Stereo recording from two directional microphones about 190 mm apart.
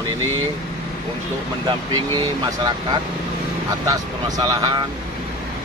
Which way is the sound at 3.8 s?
20° right (ahead or behind).